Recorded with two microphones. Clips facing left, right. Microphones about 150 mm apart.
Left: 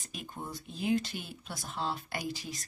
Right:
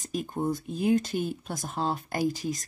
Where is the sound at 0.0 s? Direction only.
40° right (ahead or behind).